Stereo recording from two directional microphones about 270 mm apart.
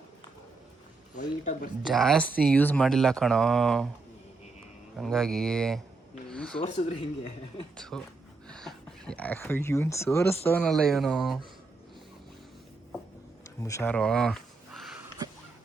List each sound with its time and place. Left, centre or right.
1.1 s speech: left
1.8 s speech: centre
4.9 s speech: centre
6.6 s speech: left
7.8 s speech: centre
13.6 s a sound: centre